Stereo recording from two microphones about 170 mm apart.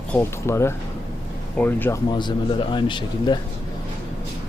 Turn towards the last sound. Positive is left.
turn(degrees=25)  # may be behind; listen again after turning